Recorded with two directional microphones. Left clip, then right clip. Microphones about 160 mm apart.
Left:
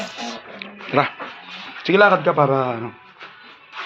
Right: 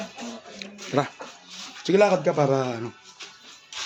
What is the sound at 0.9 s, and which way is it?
A man's voice, 30° right (ahead or behind).